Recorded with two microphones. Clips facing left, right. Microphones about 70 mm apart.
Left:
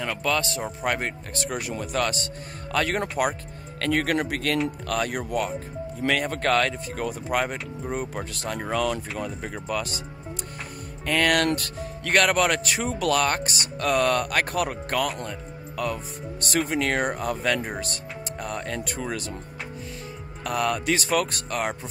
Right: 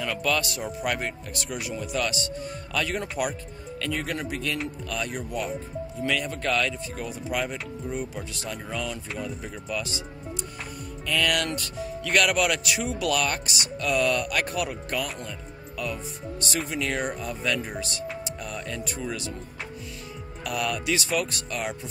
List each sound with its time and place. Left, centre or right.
0.2 s speech: left
8.5 s speech: left
11.1 s speech: left
20.4 s speech: left